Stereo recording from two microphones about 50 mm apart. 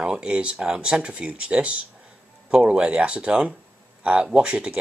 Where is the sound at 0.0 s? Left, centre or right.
Centre.